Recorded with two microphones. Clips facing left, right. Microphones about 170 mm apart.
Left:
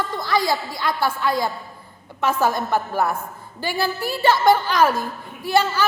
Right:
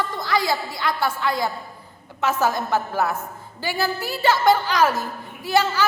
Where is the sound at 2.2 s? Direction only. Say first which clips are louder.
Left 1 dB; 15° left (ahead or behind).